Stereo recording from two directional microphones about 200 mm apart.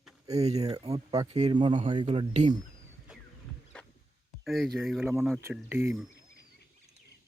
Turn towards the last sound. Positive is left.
turn(degrees=-10)  # may be behind; listen again after turning